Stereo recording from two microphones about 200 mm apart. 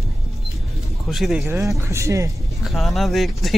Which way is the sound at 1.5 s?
15° right (ahead or behind).